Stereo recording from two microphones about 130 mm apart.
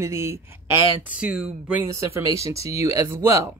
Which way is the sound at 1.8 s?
25° right (ahead or behind).